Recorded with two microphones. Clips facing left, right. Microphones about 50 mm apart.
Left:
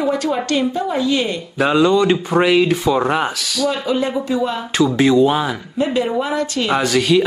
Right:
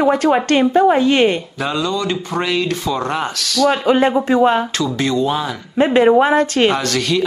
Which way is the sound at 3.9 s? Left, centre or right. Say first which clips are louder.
Right 5 dB; right.